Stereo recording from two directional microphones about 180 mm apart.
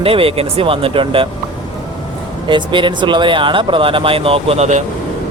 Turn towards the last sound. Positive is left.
turn(degrees=-40)  # may be behind; listen again after turning